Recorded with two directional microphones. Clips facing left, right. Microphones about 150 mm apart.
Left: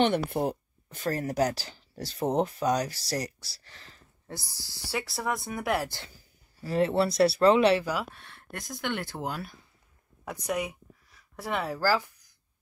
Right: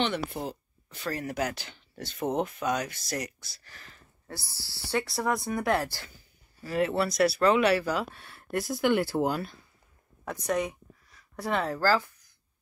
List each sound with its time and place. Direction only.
0.0 s speech: 55° left (ahead or behind); by 4.4 s 25° left (ahead or behind)
4.4 s speech: 15° left (ahead or behind)
4.9 s speech: centre (ahead or behind)
5.9 s speech: 20° left (ahead or behind)
7.8 s speech: 5° left (ahead or behind)
10.2 s a sound: 10° left (ahead or behind)